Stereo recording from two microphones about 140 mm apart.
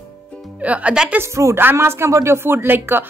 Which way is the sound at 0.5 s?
10° right (ahead or behind).